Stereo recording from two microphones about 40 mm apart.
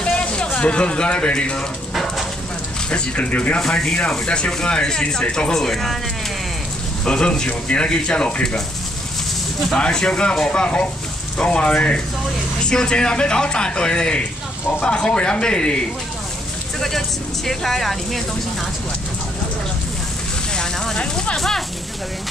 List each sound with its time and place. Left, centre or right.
0.0 s a sound: left
2.9 s speech: left
3.5 s speech: centre
7.1 s speech: left
9.8 s speech: left
17.5 s speech: centre
20.9 s speech: left
21.4 s speech: centre